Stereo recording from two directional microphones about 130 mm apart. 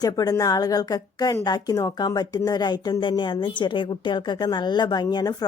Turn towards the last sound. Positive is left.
turn(degrees=30)  # may be behind; listen again after turning